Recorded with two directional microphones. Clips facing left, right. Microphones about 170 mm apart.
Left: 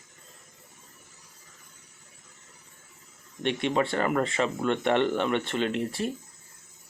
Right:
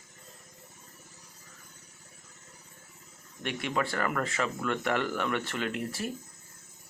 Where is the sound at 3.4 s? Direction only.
25° left (ahead or behind).